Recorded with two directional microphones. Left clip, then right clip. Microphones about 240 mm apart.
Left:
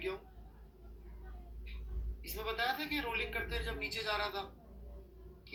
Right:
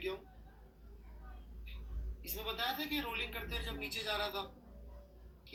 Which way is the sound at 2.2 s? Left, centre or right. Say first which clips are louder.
Left 2 dB; centre.